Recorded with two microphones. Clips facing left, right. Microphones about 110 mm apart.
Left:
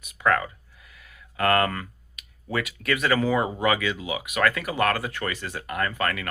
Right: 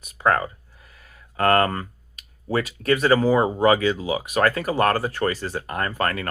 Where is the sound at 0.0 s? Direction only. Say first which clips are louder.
Right 2 dB; 35° right (ahead or behind).